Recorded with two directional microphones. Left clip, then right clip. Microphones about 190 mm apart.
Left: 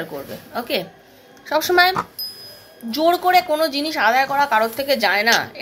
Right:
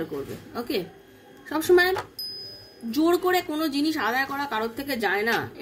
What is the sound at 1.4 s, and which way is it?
Speech, 20° right (ahead or behind).